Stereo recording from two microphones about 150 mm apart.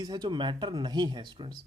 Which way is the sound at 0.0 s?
30° right (ahead or behind).